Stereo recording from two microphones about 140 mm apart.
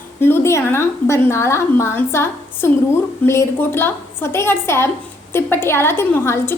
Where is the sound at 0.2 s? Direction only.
15° left (ahead or behind).